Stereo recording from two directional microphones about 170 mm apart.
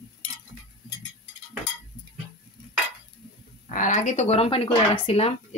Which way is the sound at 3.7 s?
50° left (ahead or behind).